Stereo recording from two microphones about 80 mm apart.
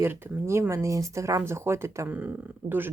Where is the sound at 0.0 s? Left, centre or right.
Right.